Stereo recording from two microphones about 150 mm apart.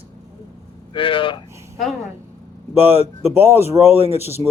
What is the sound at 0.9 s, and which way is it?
Speech, 35° left (ahead or behind).